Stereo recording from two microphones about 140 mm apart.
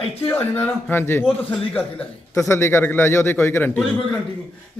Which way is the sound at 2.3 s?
20° left (ahead or behind).